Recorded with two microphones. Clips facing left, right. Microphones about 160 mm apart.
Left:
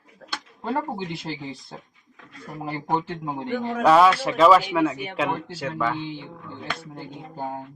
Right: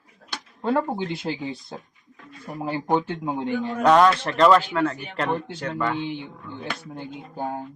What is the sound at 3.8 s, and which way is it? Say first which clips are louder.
Speech: even; 5° left (ahead or behind).